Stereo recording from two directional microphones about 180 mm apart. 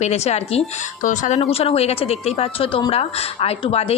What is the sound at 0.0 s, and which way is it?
Speech, 40° left (ahead or behind).